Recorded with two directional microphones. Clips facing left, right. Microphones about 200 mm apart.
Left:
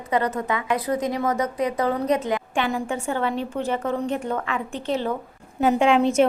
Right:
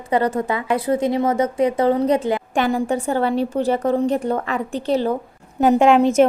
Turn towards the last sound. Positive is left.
turn(degrees=-45)  # may be behind; listen again after turning